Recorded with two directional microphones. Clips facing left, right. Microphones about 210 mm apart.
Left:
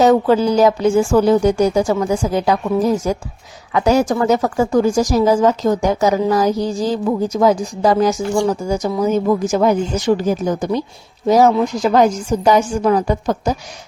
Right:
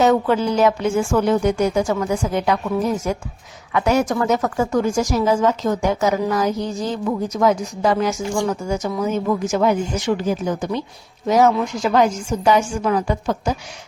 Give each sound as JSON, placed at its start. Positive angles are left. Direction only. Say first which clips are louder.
{"t": 0.0, "sound": "a woman's voice", "louder": "left 4 dB", "side_deg": 35}